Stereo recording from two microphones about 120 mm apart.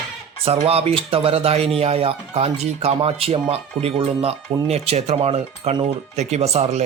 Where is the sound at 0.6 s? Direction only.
55° right (ahead or behind).